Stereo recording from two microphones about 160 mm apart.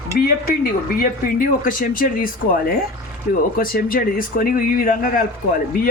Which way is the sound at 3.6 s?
65° left (ahead or behind).